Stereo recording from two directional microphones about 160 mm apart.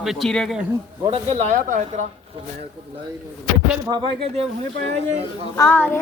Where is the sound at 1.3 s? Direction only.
45° right (ahead or behind).